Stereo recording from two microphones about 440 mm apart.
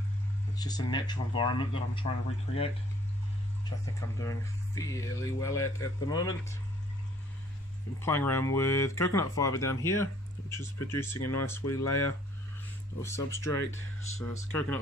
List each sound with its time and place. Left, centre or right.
0.6 s speech: centre
4.2 s speech: centre
8.0 s speech: centre
11.1 s speech: left
13.0 s speech: centre